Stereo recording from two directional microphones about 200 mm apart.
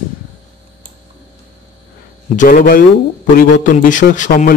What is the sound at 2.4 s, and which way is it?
A man's voice, 45° left (ahead or behind).